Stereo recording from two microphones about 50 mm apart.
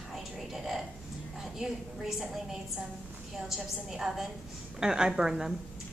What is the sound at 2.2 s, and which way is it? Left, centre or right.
A woman's voice, centre.